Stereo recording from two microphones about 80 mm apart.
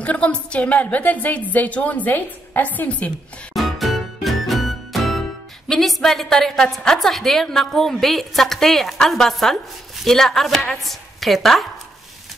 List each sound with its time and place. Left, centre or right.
0.0 s a woman's voice: centre
3.5 s music: centre
5.7 s a woman's voice: centre